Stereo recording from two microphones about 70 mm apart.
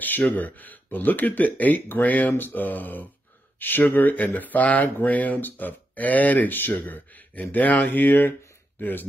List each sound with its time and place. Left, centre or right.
0.0 s speech: left